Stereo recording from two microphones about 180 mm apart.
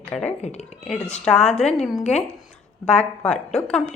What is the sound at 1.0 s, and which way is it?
Speech, 5° left (ahead or behind).